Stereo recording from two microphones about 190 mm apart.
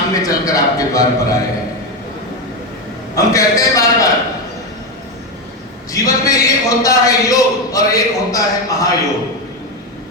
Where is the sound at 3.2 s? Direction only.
15° left (ahead or behind).